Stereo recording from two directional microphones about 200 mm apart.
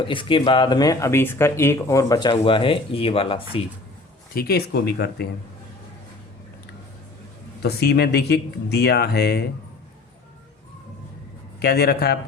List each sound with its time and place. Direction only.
0.0 s speech: 25° left (ahead or behind)
4.4 s speech: 50° left (ahead or behind)
7.6 s speech: 55° left (ahead or behind)
11.6 s speech: 50° left (ahead or behind)